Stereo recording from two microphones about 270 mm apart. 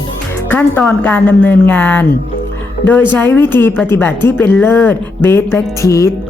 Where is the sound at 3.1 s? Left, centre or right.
Centre.